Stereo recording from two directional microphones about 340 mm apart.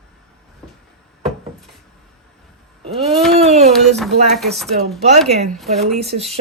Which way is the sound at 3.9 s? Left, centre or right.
Centre.